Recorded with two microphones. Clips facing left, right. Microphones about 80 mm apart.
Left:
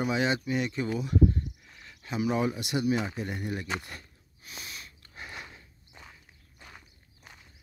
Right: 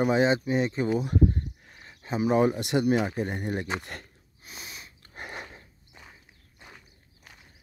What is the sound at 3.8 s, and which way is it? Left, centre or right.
Speech, right.